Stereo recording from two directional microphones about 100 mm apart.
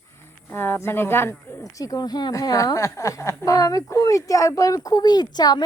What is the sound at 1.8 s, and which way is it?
A woman's voice, 40° left (ahead or behind).